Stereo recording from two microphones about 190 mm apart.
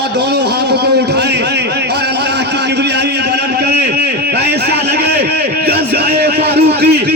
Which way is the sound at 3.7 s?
60° right (ahead or behind).